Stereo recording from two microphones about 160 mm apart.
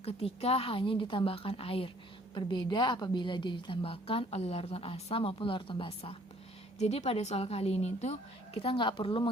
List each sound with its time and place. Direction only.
0.0 s a woman's voice: 40° left (ahead or behind)